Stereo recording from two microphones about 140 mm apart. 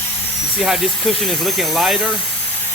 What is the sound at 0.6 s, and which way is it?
Speech, centre (ahead or behind).